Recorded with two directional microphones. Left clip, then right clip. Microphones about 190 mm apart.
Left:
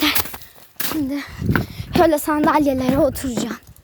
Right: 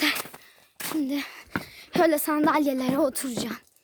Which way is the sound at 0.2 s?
60° left (ahead or behind).